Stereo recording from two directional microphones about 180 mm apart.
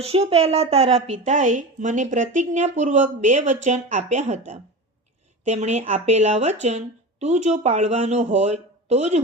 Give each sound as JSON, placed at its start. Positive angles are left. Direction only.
{"t": 0.0, "sound": "speech", "side_deg": -35}